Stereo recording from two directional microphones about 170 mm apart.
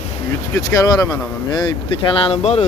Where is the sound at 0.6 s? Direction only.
20° left (ahead or behind).